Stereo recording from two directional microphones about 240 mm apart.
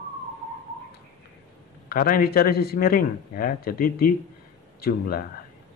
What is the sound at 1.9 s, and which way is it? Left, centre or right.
A man's voice, left.